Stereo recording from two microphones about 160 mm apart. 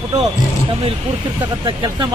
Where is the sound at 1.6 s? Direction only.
30° right (ahead or behind).